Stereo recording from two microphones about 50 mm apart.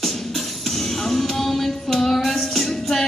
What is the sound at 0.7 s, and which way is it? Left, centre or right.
Music, centre.